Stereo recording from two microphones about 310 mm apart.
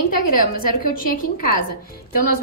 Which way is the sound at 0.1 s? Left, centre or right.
Left.